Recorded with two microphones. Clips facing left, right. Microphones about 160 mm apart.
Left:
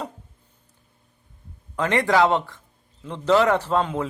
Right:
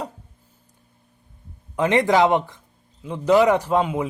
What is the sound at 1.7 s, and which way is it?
Speech, 20° right (ahead or behind).